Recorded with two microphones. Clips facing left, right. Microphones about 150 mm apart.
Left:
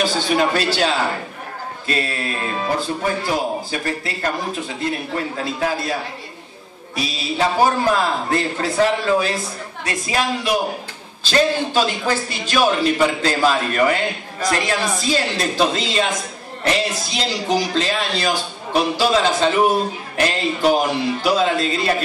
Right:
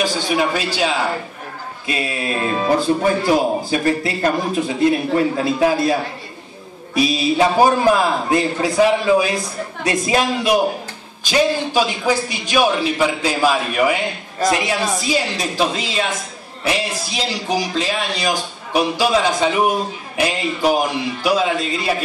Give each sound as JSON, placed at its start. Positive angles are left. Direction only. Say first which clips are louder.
{"t": 0.0, "sound": "speech", "louder": "even", "side_deg": -10}
{"t": 7.0, "sound": "speech", "louder": "right 6 dB", "side_deg": -15}